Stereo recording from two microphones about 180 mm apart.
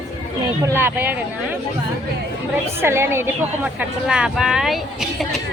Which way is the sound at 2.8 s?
15° right (ahead or behind).